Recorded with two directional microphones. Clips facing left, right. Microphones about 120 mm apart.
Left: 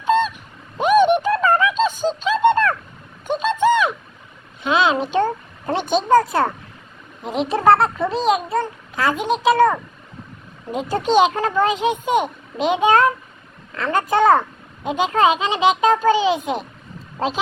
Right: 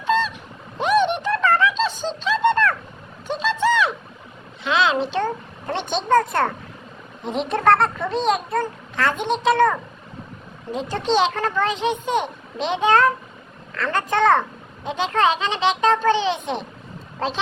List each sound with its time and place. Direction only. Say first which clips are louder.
0.0 s honk: left 3 dB; 15° left (ahead or behind)
0.8 s a sound: left 5 dB; 10° left (ahead or behind)
5.9 s a child's voice: left 3 dB; 5° left (ahead or behind)
10.7 s a child's voice: left 2 dB; 10° left (ahead or behind)